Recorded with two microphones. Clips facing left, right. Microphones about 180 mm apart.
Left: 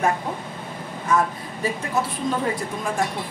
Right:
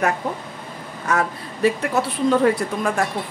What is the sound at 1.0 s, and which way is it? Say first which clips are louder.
A woman's voice: even; 70° right (ahead or behind).